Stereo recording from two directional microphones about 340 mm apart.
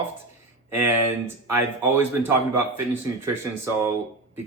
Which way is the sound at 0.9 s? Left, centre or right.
Right.